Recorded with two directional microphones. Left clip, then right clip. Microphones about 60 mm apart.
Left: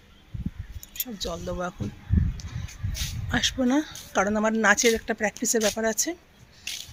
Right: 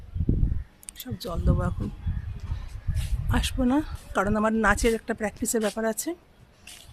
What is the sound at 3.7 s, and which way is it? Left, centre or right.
Speech, right.